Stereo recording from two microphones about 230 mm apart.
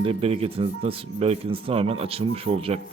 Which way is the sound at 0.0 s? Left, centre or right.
Right.